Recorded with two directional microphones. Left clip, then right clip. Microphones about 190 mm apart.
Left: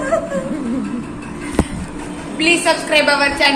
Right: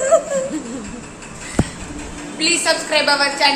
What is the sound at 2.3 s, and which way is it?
A woman's voice, 10° right (ahead or behind).